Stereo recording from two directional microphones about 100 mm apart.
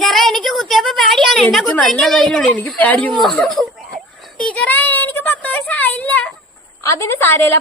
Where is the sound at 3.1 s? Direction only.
Centre (ahead or behind).